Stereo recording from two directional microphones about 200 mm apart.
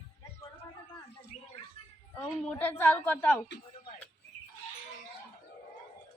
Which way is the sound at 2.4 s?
10° left (ahead or behind).